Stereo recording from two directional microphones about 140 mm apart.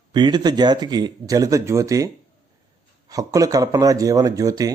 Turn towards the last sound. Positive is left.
turn(degrees=-25)  # may be behind; listen again after turning